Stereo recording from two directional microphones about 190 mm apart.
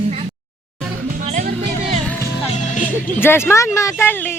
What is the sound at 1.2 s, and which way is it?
Music, 40° right (ahead or behind).